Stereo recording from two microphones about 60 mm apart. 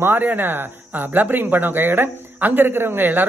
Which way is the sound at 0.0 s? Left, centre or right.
Right.